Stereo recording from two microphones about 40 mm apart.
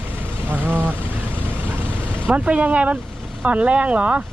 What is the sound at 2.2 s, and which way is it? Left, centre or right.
Speech, right.